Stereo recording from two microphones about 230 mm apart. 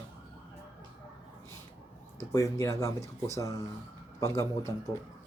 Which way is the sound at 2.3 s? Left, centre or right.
Centre.